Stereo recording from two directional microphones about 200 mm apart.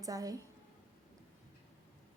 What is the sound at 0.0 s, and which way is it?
Speech, 15° right (ahead or behind).